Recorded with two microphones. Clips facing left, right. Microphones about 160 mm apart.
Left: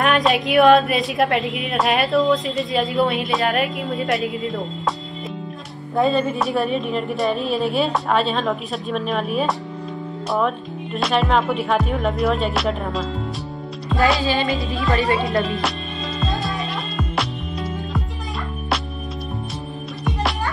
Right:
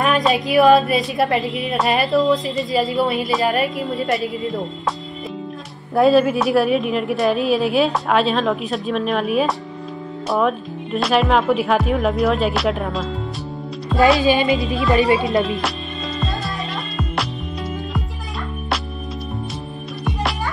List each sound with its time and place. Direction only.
0.0 s a woman's voice: centre (ahead or behind)
5.9 s a woman's voice: 5° right (ahead or behind)
14.2 s music: 15° right (ahead or behind)
15.4 s a woman's voice: centre (ahead or behind)
16.2 s music: centre (ahead or behind)